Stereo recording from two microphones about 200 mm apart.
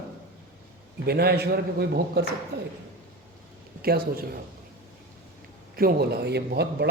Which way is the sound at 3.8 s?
50° right (ahead or behind).